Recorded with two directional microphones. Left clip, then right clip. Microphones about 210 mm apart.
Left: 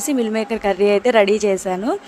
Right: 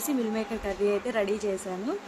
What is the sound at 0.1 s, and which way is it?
A woman's voice, 40° left (ahead or behind).